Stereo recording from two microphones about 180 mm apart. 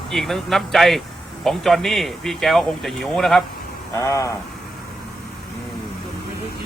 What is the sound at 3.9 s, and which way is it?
Speech, 15° left (ahead or behind).